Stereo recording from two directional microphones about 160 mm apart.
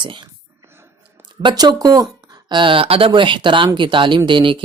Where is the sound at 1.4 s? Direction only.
30° right (ahead or behind).